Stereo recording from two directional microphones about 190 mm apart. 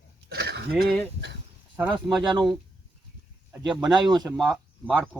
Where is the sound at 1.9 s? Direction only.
Centre (ahead or behind).